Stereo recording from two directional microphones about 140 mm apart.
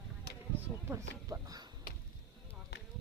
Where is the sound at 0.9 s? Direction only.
25° right (ahead or behind).